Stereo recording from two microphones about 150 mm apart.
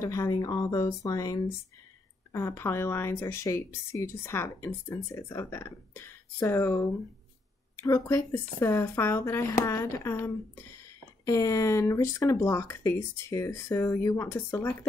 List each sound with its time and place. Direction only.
0.0 s a woman's voice: 20° left (ahead or behind)